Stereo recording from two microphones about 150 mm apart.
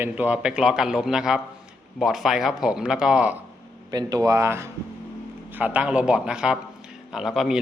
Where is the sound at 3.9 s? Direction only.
25° right (ahead or behind); by 7.6 s centre (ahead or behind).